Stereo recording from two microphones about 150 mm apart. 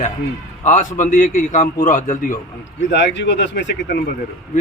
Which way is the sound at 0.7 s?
60° left (ahead or behind).